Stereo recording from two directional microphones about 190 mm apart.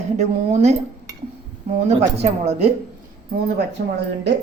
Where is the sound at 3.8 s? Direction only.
55° right (ahead or behind).